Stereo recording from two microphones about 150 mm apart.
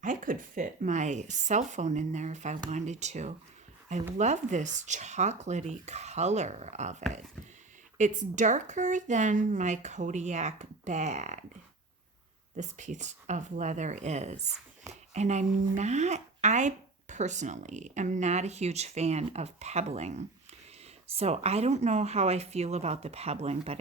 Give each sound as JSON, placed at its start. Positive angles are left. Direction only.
{"t": 0.0, "sound": "speech", "side_deg": -60}
{"t": 12.5, "sound": "speech", "side_deg": -55}